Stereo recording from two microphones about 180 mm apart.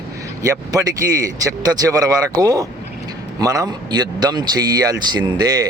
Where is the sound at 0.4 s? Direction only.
20° right (ahead or behind).